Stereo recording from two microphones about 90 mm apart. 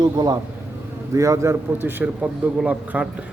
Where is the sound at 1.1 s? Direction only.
35° right (ahead or behind).